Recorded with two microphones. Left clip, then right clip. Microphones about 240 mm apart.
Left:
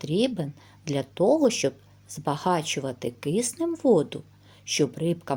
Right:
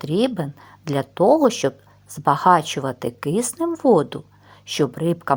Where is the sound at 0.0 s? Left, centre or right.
Centre.